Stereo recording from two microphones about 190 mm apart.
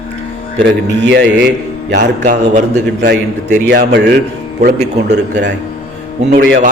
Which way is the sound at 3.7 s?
60° right (ahead or behind).